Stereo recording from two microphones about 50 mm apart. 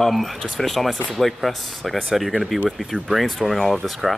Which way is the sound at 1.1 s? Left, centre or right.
Centre.